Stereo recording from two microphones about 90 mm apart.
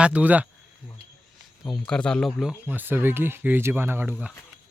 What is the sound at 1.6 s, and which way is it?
Speech, 10° left (ahead or behind).